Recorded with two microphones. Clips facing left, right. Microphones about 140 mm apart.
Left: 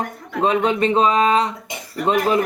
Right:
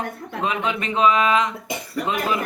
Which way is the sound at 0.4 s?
35° left (ahead or behind).